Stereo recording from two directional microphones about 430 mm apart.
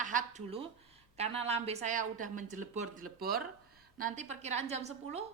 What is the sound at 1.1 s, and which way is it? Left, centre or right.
A woman's voice, centre.